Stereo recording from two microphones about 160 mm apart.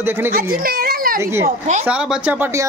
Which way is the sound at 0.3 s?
65° right (ahead or behind).